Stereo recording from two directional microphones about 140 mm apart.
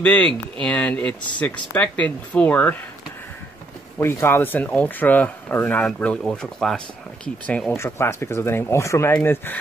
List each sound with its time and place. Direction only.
0.0 s speech: 10° left (ahead or behind)
4.0 s speech: 15° left (ahead or behind)